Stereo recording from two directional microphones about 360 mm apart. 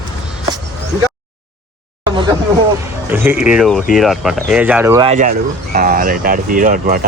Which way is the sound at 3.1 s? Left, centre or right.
Centre.